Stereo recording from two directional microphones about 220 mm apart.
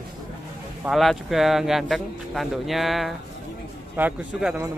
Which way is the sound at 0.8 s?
Centre (ahead or behind).